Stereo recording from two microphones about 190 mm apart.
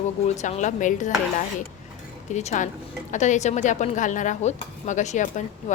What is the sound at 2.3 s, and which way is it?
Dishes, 35° left (ahead or behind).